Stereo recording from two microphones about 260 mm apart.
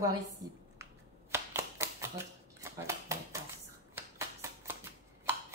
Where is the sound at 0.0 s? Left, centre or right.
Centre.